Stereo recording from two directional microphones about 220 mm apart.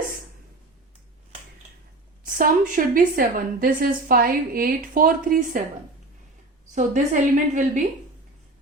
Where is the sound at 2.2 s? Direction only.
40° right (ahead or behind).